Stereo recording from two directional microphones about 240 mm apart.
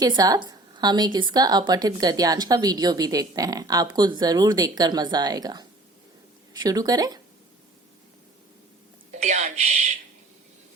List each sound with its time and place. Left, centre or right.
0.0 s speech: centre
9.1 s speech: right